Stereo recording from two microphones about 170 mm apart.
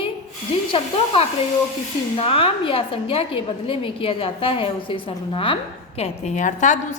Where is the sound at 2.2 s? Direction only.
35° left (ahead or behind).